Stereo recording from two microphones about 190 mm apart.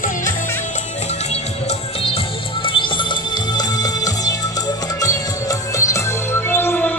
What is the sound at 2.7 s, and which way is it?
Music, 25° left (ahead or behind).